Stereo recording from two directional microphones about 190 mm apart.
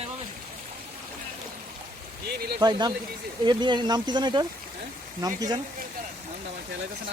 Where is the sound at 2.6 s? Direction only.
20° right (ahead or behind).